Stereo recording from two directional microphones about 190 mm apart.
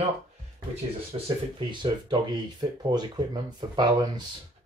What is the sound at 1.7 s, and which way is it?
Speech, 25° right (ahead or behind).